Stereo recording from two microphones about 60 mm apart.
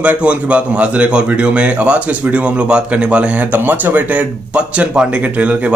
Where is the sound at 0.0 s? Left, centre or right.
Right.